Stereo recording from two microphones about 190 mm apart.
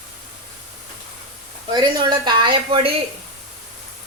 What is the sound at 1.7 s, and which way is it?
A woman's voice, 20° right (ahead or behind).